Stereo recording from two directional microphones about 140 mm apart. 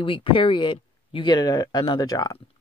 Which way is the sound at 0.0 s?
40° left (ahead or behind).